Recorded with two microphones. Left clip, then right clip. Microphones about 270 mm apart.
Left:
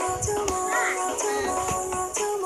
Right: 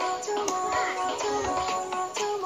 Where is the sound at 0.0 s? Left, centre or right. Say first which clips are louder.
Left 2 dB; left.